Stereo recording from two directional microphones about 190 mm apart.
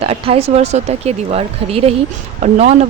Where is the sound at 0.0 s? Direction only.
30° right (ahead or behind).